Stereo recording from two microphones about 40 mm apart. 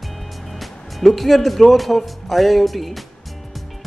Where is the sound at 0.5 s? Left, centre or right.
Centre.